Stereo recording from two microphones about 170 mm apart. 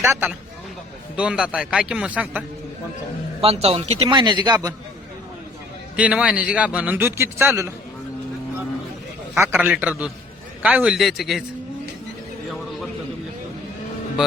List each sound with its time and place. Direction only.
0.0 s a man's voice: 15° right (ahead or behind)
3.4 s speech: 35° right (ahead or behind)
6.0 s a man's voice: 5° right (ahead or behind)
9.3 s a man's voice: 10° right (ahead or behind)